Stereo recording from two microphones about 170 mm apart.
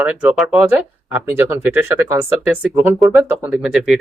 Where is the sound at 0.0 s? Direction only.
5° right (ahead or behind).